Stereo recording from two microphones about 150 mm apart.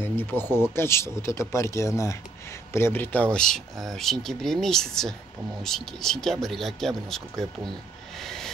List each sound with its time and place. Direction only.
0.0 s speech: 15° left (ahead or behind)
8.2 s vehicle: 5° left (ahead or behind)